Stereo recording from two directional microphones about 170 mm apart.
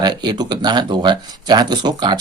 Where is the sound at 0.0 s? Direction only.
25° right (ahead or behind).